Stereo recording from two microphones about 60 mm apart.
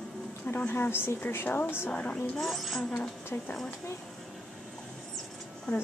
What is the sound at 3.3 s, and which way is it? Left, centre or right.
Speech, left.